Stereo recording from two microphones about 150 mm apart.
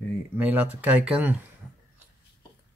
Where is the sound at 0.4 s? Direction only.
10° right (ahead or behind).